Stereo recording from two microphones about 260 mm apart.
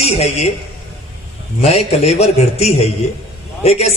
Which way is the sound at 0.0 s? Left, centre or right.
Left.